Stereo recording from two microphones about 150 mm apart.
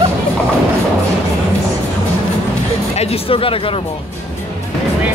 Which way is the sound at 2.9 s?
40° left (ahead or behind).